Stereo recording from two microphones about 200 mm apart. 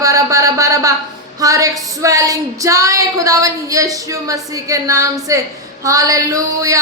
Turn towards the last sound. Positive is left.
turn(degrees=-15)  # may be behind; listen again after turning